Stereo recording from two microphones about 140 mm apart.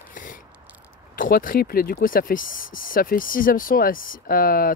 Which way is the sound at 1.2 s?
90° left.